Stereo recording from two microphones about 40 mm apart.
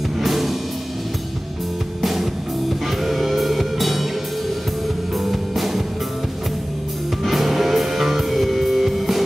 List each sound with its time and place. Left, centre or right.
0.2 s music: centre
2.0 s music: centre
5.2 s music: centre
7.2 s music: centre